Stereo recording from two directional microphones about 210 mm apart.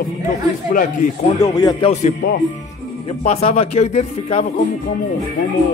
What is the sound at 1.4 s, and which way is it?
Speech, 20° left (ahead or behind).